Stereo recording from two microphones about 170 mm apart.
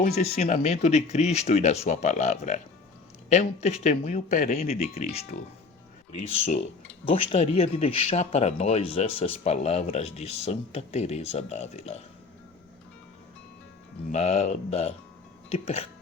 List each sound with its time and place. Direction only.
0.0 s speech: 40° left (ahead or behind)
14.1 s speech: 40° left (ahead or behind)